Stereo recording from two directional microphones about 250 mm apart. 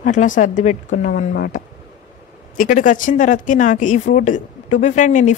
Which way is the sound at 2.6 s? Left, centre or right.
Left.